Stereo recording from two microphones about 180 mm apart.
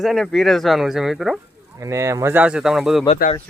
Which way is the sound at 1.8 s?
15° right (ahead or behind).